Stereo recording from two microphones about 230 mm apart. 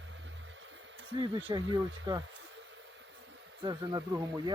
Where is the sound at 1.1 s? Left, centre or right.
Centre.